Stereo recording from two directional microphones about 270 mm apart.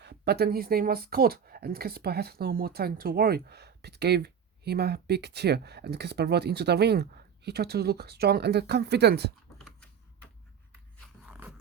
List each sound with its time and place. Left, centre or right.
0.0 s speech: right
9.6 s typing: centre
11.3 s dog: centre